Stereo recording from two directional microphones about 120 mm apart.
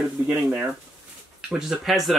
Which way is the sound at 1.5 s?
Centre (ahead or behind).